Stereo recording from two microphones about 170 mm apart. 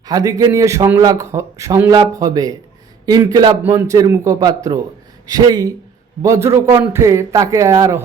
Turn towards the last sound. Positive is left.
turn(degrees=-20)  # may be behind; listen again after turning